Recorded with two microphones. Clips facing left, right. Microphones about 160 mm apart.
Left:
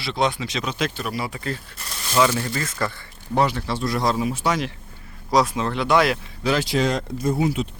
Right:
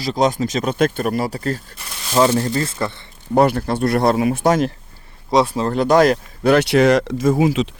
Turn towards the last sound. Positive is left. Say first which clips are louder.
# right 6 dB
turn(degrees=-90)